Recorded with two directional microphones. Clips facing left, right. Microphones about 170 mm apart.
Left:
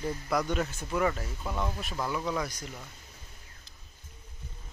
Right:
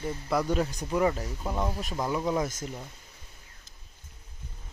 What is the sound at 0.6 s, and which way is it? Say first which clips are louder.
Speech: right 3 dB; 15° right (ahead or behind).